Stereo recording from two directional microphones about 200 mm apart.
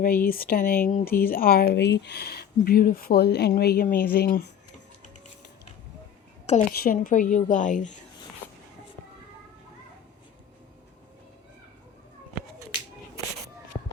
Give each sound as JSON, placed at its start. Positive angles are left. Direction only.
{"t": 0.0, "sound": "speech", "side_deg": 45}
{"t": 6.7, "sound": "a woman's voice", "side_deg": 45}